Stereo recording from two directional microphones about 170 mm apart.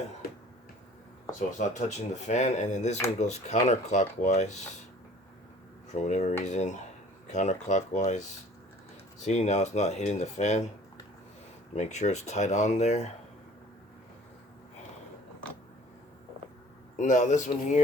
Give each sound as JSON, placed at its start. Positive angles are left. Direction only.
{"t": 1.5, "sound": "speech", "side_deg": 45}
{"t": 5.9, "sound": "speech", "side_deg": 45}
{"t": 9.2, "sound": "speech", "side_deg": 40}
{"t": 11.8, "sound": "speech", "side_deg": 45}
{"t": 17.0, "sound": "speech", "side_deg": 50}